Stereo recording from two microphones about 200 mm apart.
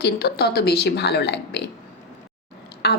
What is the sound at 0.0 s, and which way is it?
Speech, 55° left (ahead or behind).